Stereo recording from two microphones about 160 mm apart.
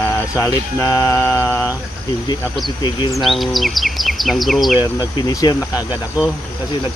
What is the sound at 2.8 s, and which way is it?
Speech, 25° left (ahead or behind).